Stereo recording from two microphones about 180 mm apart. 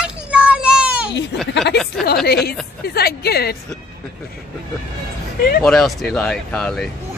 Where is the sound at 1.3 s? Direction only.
70° left (ahead or behind).